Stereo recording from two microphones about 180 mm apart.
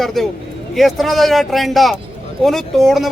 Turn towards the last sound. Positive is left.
turn(degrees=0)  # may be behind; listen again after turning